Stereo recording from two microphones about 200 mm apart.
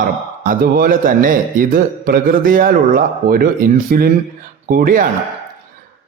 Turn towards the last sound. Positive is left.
turn(degrees=-45)  # may be behind; listen again after turning